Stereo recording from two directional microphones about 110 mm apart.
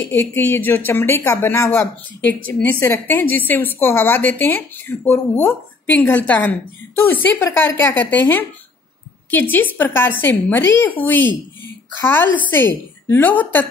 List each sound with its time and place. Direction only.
0.0 s a woman's voice: 20° left (ahead or behind)